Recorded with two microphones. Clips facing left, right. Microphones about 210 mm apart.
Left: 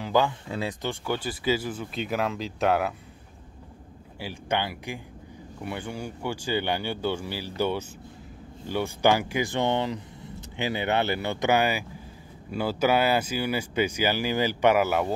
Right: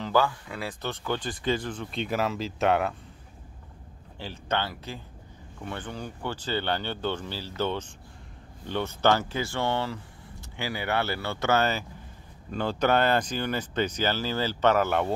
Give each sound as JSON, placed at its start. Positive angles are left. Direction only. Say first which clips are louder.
{"t": 0.0, "sound": "speech", "louder": "left 1 dB", "side_deg": 20}
{"t": 4.2, "sound": "speech", "louder": "left 1 dB", "side_deg": 10}